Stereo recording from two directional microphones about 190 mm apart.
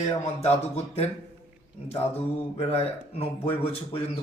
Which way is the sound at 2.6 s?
30° left (ahead or behind).